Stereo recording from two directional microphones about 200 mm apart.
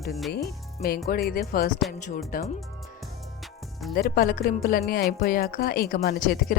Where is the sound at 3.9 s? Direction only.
50° left (ahead or behind).